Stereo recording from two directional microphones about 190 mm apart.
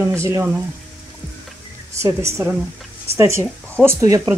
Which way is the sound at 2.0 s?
15° right (ahead or behind).